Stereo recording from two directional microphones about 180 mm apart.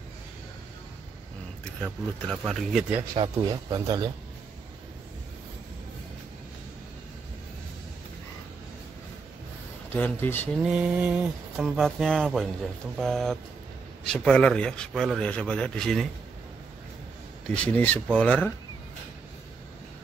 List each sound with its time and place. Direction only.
1.8 s a man's voice: 5° right (ahead or behind)
3.2 s speech: 20° right (ahead or behind)
9.9 s speech: 10° left (ahead or behind)
10.6 s a man's voice: 5° right (ahead or behind)
17.6 s speech: 10° left (ahead or behind)